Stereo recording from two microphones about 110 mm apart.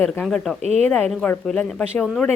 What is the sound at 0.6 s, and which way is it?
Speech, 90° right.